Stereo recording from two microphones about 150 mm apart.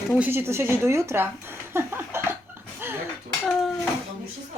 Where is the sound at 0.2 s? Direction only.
15° right (ahead or behind).